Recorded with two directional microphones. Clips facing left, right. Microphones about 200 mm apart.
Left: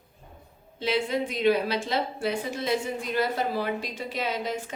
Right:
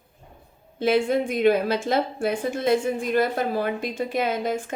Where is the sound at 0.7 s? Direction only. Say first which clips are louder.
Right 6 dB; 50° right (ahead or behind).